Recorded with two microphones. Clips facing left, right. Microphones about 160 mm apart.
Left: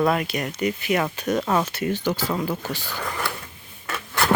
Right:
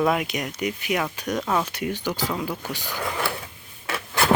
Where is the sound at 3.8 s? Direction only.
5° right (ahead or behind).